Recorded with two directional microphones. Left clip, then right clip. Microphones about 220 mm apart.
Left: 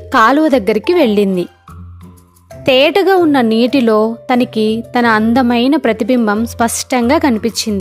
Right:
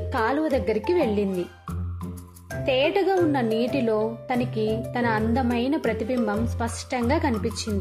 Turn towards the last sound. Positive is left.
turn(degrees=45)  # may be behind; listen again after turning